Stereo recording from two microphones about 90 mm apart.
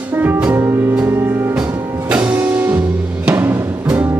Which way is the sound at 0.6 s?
30° right (ahead or behind).